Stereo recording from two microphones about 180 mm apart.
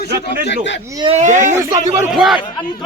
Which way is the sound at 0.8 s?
20° right (ahead or behind).